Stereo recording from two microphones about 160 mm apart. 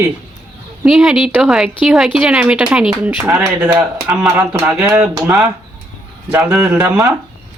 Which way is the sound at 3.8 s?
5° right (ahead or behind).